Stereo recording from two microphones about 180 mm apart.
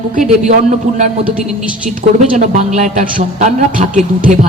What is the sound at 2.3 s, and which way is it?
A man's voice, 40° right (ahead or behind).